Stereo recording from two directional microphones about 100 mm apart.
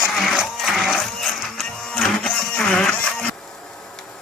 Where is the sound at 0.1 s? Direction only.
Centre (ahead or behind).